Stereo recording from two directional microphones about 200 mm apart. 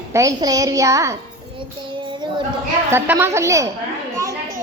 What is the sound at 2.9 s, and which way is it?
Speech, 10° right (ahead or behind).